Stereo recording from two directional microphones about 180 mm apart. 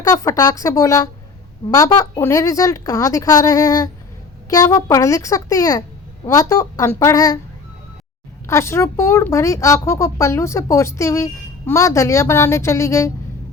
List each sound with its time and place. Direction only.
0.0 s a woman's voice: 20° left (ahead or behind)
8.4 s speech: 15° left (ahead or behind)